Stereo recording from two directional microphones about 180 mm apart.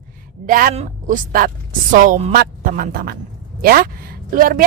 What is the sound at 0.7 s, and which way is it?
A woman's voice, 40° right (ahead or behind).